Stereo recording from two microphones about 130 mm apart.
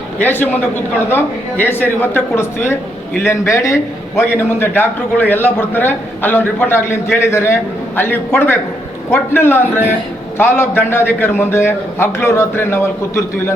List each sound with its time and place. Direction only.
0.2 s a man's voice: 15° left (ahead or behind)